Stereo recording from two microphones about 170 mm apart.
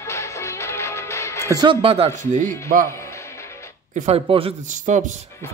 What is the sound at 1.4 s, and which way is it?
Speech, 25° right (ahead or behind).